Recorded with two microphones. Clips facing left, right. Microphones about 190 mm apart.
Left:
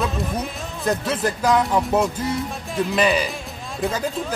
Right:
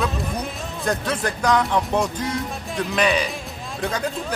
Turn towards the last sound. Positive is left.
turn(degrees=5)  # may be behind; listen again after turning